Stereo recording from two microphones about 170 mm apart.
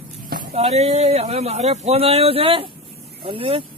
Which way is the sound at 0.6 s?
40° right (ahead or behind).